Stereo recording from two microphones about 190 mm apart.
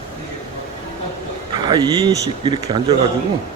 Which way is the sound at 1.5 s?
20° right (ahead or behind).